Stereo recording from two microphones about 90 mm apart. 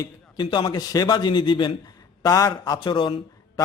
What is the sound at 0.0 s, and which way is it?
Speech, 55° left (ahead or behind).